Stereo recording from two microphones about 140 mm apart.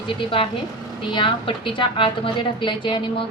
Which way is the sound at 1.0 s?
35° left (ahead or behind).